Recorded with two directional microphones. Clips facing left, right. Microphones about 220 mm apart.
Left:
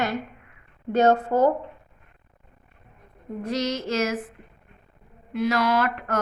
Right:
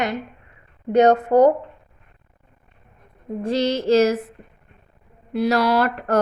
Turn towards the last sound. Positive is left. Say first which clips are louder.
# right 5 dB
turn(degrees=-35)  # may be behind; listen again after turning